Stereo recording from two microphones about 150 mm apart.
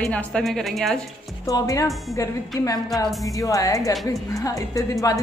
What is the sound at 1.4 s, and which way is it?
Speech, 20° left (ahead or behind).